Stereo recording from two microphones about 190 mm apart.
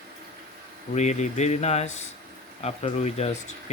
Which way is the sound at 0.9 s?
35° left (ahead or behind).